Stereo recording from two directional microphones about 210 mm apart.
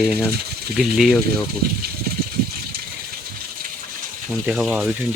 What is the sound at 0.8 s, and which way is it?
Speech, centre (ahead or behind).